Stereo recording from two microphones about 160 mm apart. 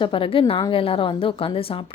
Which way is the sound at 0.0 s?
35° left (ahead or behind).